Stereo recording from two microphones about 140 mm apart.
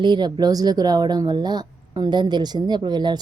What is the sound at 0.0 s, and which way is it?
A woman's voice, 30° right (ahead or behind).